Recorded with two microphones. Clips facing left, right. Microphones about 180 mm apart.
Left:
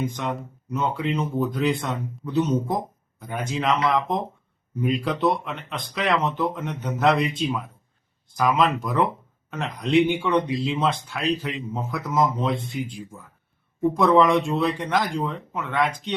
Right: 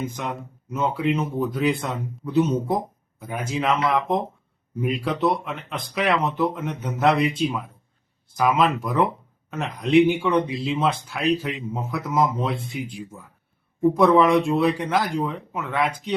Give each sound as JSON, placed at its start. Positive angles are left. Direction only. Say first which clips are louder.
{"t": 0.0, "sound": "speech", "louder": "left 2 dB", "side_deg": -5}